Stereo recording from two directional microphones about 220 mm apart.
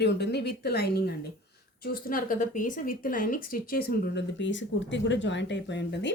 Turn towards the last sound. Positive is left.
turn(degrees=50)  # may be behind; listen again after turning